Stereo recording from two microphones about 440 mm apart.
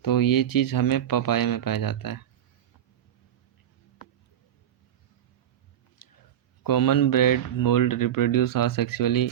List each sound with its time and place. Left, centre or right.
0.0 s speech: left
6.0 s a sound: left
6.6 s speech: left